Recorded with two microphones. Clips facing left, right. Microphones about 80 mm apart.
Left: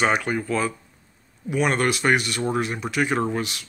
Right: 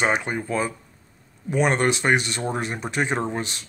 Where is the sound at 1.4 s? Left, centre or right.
Right.